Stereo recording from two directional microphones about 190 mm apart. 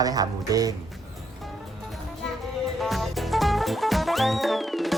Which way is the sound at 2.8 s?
Centre (ahead or behind).